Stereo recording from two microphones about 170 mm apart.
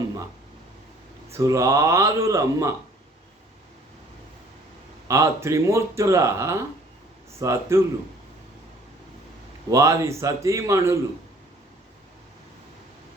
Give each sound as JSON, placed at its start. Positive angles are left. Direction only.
{"t": 1.3, "sound": "speech", "side_deg": -20}
{"t": 5.0, "sound": "speech", "side_deg": -15}
{"t": 9.6, "sound": "speech", "side_deg": -20}